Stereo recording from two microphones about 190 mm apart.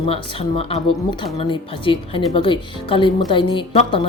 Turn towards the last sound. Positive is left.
turn(degrees=25)  # may be behind; listen again after turning